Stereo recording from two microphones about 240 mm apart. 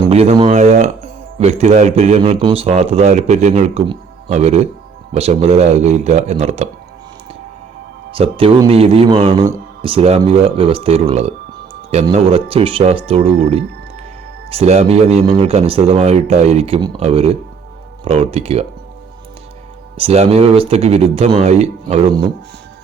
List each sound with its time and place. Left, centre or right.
0.1 s speech: right
8.1 s speech: right
20.0 s speech: right